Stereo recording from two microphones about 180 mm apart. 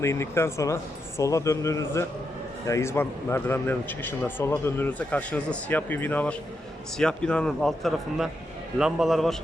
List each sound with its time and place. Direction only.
0.0 s a man's voice: 15° left (ahead or behind); by 9.3 s centre (ahead or behind)